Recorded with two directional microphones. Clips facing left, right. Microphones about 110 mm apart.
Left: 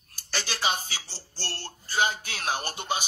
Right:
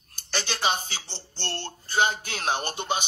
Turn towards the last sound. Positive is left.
turn(degrees=-25)  # may be behind; listen again after turning